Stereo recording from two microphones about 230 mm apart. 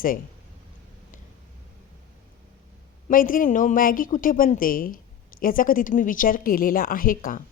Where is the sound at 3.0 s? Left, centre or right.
Left.